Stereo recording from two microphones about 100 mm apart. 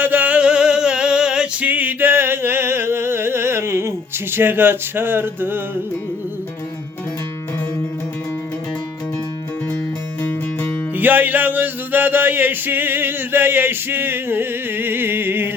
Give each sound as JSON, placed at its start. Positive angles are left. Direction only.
{"t": 0.0, "sound": "male singing", "side_deg": -15}
{"t": 10.2, "sound": "music", "side_deg": 20}
{"t": 10.9, "sound": "music", "side_deg": -20}